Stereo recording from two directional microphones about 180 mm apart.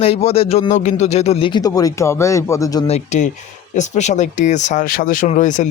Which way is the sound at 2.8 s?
40° left (ahead or behind).